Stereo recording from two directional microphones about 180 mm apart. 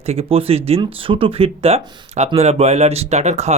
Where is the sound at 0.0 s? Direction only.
35° right (ahead or behind).